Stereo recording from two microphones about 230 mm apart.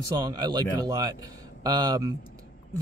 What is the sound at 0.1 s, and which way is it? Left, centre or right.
Speech, centre.